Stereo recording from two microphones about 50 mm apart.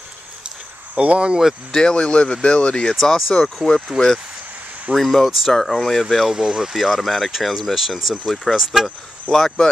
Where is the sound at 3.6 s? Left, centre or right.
Centre.